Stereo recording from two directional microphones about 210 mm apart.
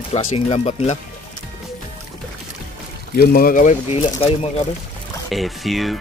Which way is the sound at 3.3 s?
45° left (ahead or behind).